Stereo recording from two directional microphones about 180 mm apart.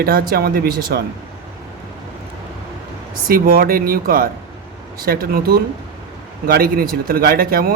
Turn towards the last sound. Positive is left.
turn(degrees=-55)  # may be behind; listen again after turning